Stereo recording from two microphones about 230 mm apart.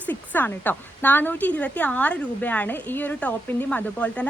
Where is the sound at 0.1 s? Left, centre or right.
Centre.